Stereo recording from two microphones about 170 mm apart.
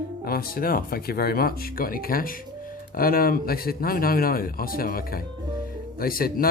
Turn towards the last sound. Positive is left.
turn(degrees=60)  # may be behind; listen again after turning